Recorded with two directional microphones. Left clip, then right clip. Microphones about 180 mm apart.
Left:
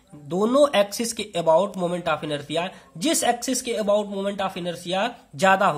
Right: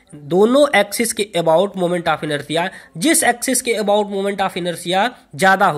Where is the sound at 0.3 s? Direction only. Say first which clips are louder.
Right 6 dB; 30° right (ahead or behind).